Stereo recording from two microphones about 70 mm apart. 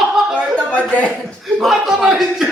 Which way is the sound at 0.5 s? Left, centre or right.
Centre.